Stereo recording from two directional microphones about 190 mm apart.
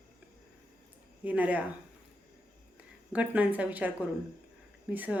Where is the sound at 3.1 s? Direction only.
10° right (ahead or behind).